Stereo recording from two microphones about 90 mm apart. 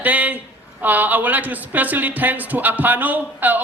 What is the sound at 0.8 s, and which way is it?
Speech, 20° right (ahead or behind).